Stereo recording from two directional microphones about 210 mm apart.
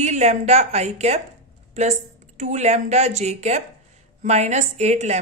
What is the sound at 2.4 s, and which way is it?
A woman's voice, 35° right (ahead or behind).